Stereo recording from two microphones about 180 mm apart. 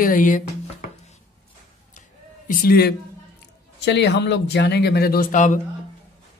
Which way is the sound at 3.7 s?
75° left (ahead or behind).